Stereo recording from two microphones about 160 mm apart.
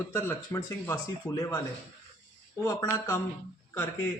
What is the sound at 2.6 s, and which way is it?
Speech, 15° left (ahead or behind).